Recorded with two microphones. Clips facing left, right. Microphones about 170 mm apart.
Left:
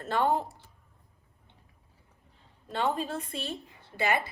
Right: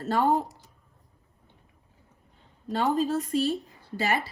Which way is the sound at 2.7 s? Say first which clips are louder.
Right 5 dB; 40° right (ahead or behind).